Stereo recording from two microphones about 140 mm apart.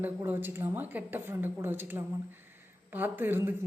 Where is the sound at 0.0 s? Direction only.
15° right (ahead or behind).